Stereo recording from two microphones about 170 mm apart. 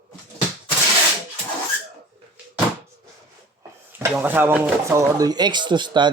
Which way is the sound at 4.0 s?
10° right (ahead or behind).